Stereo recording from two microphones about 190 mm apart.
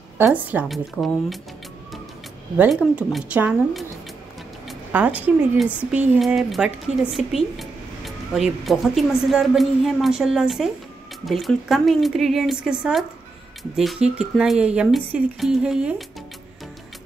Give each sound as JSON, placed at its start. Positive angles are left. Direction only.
{"t": 0.2, "sound": "a woman's voice", "side_deg": -10}
{"t": 2.5, "sound": "speech", "side_deg": -5}